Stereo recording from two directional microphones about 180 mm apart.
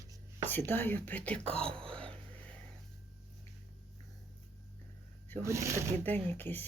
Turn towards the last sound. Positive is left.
turn(degrees=10)  # may be behind; listen again after turning